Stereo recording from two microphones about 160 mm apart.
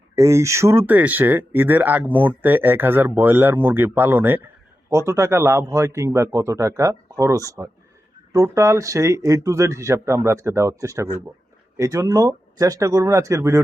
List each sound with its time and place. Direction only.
0.2 s speech: 20° right (ahead or behind)